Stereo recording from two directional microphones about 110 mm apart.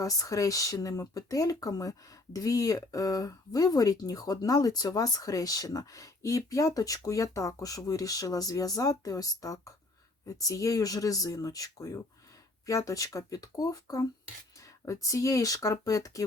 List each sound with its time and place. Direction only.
0.0 s speech: 30° left (ahead or behind)